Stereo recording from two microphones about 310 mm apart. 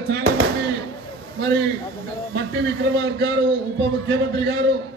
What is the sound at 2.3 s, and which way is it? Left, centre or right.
A man's voice, right.